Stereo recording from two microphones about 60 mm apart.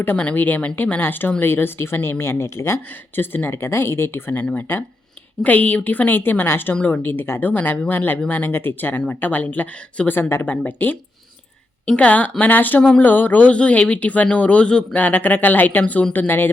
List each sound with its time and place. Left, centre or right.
0.2 s speech: left
2.9 s speech: left
5.4 s speech: left